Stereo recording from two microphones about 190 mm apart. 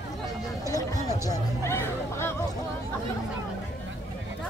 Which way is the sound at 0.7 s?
20° left (ahead or behind).